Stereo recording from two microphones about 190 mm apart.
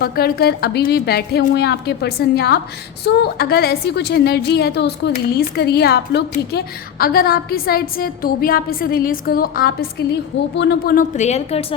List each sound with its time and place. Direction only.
0.0 s a woman's voice: 55° left (ahead or behind); by 11.8 s 35° left (ahead or behind)